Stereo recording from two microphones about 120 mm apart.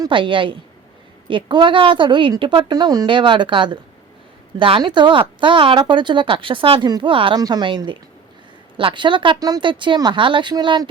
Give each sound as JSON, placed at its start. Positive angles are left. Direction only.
{"t": 0.0, "sound": "speech", "side_deg": -45}
{"t": 7.3, "sound": "speech", "side_deg": -35}